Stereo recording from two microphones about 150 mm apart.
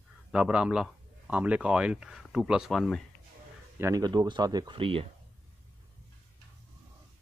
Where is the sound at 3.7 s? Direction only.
20° right (ahead or behind); by 5.0 s 35° right (ahead or behind).